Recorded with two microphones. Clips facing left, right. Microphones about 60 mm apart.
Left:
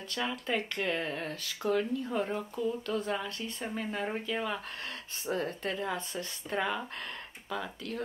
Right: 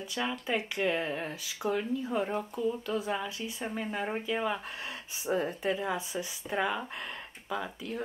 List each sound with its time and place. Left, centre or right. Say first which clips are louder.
0.1 s speech: even; centre